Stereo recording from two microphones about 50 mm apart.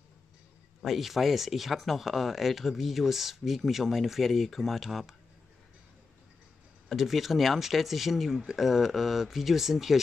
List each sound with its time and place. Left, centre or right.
0.8 s speech: centre
6.9 s speech: centre